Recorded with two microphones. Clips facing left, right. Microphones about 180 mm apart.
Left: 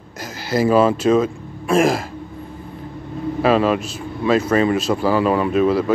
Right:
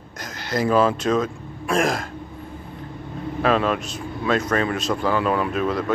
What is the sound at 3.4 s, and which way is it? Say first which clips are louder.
A man's voice: left 4 dB; 5° left (ahead or behind).